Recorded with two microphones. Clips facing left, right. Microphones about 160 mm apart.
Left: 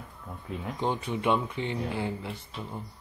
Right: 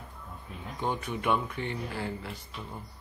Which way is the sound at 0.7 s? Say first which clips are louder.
Left 1 dB; 25° left (ahead or behind).